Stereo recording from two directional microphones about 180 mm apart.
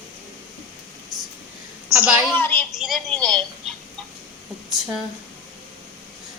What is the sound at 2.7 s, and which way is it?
Speech, centre (ahead or behind).